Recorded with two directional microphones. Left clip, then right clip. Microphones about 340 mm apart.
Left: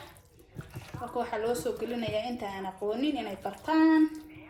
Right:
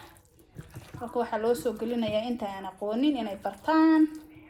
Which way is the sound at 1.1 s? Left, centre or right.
Centre.